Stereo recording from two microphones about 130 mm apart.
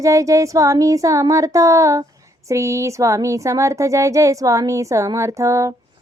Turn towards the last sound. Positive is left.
turn(degrees=-25)  # may be behind; listen again after turning